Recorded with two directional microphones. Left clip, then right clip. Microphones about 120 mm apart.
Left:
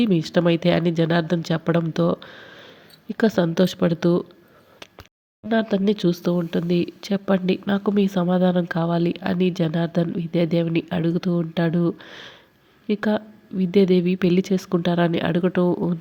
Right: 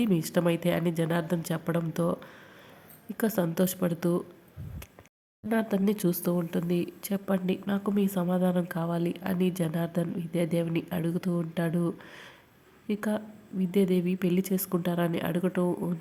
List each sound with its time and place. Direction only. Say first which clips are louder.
0.0 s speech: left 7 dB; 30° left (ahead or behind)
5.5 s speech: left 7 dB; 25° left (ahead or behind)